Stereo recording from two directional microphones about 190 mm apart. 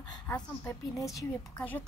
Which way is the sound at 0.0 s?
20° left (ahead or behind).